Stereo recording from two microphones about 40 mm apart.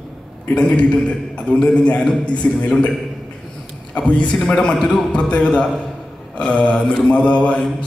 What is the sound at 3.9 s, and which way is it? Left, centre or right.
A man's voice, left.